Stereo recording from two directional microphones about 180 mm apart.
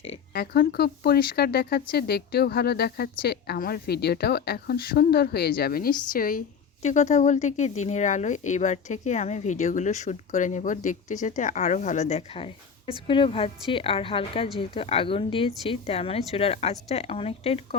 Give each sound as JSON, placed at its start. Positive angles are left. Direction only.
{"t": 0.3, "sound": "speech", "side_deg": 60}
{"t": 6.8, "sound": "speech", "side_deg": 40}